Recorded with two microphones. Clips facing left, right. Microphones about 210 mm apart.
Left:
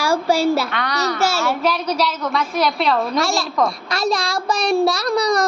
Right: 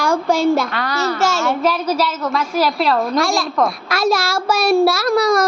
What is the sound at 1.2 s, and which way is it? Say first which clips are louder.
Child singing: right 1 dB; 10° left (ahead or behind).